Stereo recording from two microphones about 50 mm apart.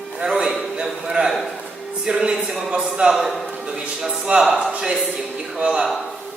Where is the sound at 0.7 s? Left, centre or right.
Centre.